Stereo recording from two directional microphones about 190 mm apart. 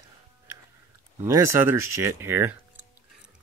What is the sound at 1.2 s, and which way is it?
Speech, 15° right (ahead or behind).